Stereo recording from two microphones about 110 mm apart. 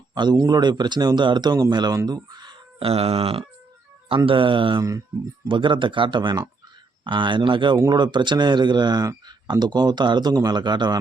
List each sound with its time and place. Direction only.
0.1 s speech: 40° right (ahead or behind)
2.0 s a sound: 40° right (ahead or behind)
2.8 s speech: 65° right (ahead or behind)
4.8 s speech: 30° right (ahead or behind)
5.5 s speech: 50° right (ahead or behind)